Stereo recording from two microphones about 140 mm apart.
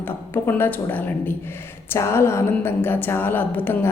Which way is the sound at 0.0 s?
15° left (ahead or behind).